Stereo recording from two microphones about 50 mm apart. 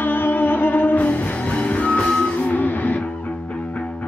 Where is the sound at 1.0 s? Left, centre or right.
Left.